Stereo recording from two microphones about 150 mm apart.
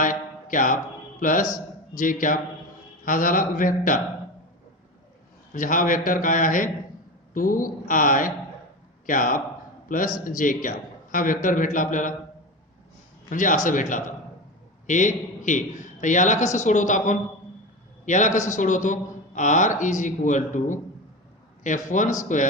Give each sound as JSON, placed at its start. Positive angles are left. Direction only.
{"t": 0.0, "sound": "mantra", "side_deg": 60}
{"t": 1.2, "sound": "a man's voice", "side_deg": 60}
{"t": 5.5, "sound": "a man's voice", "side_deg": 65}
{"t": 13.3, "sound": "a man's voice", "side_deg": 60}
{"t": 21.8, "sound": "a man's voice", "side_deg": 60}